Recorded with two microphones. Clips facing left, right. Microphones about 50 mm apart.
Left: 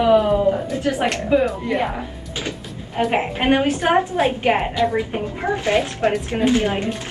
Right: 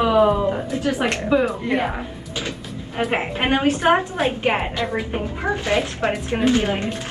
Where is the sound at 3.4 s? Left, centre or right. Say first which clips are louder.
Left 1 dB; right.